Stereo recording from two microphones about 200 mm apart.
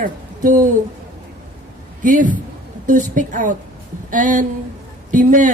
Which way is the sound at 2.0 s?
40° right (ahead or behind).